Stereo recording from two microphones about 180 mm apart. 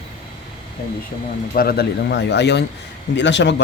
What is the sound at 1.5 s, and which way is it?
Speech, 55° left (ahead or behind).